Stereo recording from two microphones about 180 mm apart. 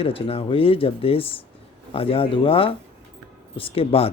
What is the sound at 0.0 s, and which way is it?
A man's voice, 30° left (ahead or behind).